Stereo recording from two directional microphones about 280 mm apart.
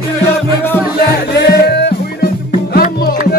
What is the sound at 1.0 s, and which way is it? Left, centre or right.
Music, left.